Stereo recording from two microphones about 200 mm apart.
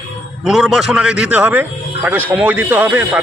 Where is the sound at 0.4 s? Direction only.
5° right (ahead or behind).